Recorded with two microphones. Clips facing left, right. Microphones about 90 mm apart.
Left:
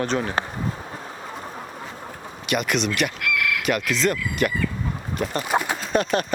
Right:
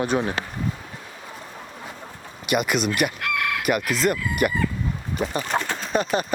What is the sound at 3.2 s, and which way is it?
Chicken, 35° right (ahead or behind).